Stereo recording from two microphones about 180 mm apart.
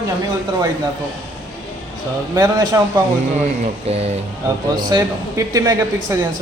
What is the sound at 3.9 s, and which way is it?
Speech, 35° right (ahead or behind).